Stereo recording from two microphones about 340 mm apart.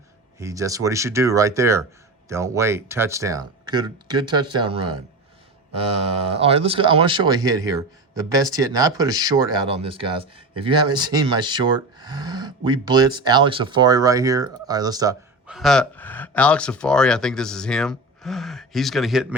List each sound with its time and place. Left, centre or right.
0.3 s a man's voice: centre
6.4 s a man's voice: centre